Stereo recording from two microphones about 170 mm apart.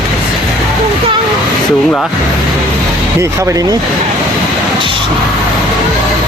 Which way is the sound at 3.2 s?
20° right (ahead or behind).